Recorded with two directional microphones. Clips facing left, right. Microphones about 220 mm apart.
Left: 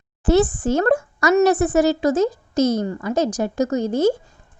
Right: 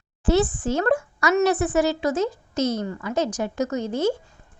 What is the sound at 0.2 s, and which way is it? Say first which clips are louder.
A woman's voice: left 4 dB; 45° left (ahead or behind).